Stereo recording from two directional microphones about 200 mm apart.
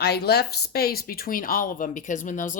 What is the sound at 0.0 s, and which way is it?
Speech, 55° left (ahead or behind).